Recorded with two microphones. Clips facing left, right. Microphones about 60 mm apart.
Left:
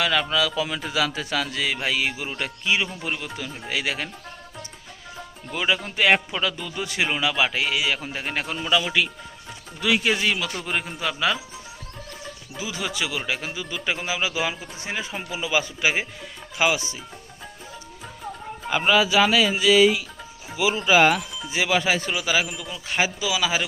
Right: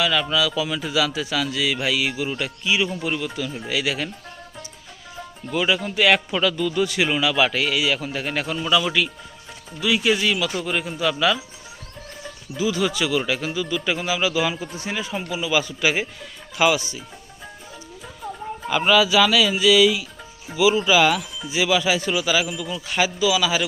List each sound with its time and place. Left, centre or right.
0.0 s a man's voice: left
5.5 s a man's voice: left
10.0 s a man's voice: left
12.5 s speech: left
18.9 s a man's voice: left